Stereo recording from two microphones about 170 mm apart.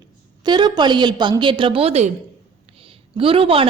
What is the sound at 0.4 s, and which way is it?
A woman's voice, 25° right (ahead or behind).